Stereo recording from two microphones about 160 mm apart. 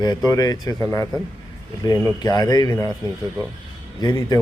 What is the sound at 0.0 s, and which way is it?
A man's voice, 25° left (ahead or behind).